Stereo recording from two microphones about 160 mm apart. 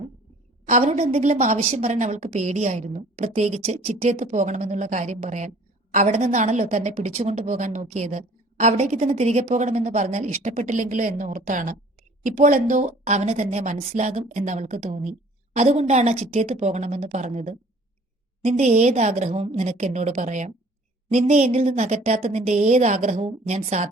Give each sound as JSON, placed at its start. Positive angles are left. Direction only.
{"t": 0.7, "sound": "a woman's voice", "side_deg": -45}